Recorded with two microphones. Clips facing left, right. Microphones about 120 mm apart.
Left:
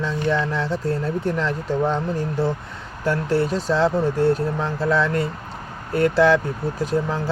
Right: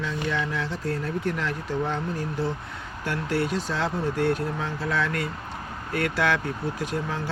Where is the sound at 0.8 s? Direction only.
30° left (ahead or behind).